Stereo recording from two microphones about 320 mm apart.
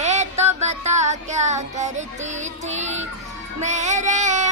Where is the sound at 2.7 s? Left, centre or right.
Right.